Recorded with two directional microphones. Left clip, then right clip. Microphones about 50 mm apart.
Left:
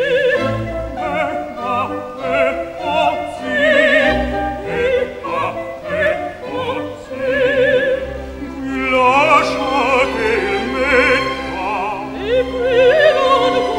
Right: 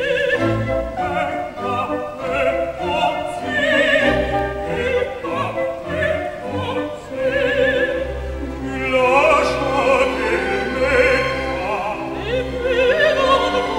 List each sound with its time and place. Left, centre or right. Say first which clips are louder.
0.0 s music: left 4 dB; left
1.7 s opera: left 3 dB; left
3.5 s music: left 4 dB; left
4.7 s opera: left 4 dB; left
7.2 s opera: left 3 dB; left
10.8 s music: left 2 dB; left
12.3 s opera: left 6 dB; left